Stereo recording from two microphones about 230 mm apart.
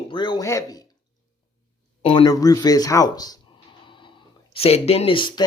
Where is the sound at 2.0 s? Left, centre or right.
Left.